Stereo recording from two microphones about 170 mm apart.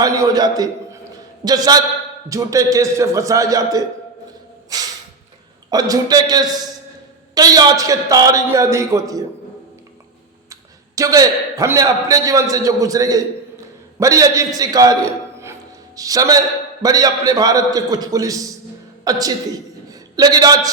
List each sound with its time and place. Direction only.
0.0 s a sound: 20° right (ahead or behind)
1.5 s a man's voice: 20° right (ahead or behind)
5.7 s a man's voice: 20° right (ahead or behind)
10.5 s a man's voice: 20° right (ahead or behind)
16.0 s a man's voice: 20° right (ahead or behind)
19.9 s a sound: 20° right (ahead or behind)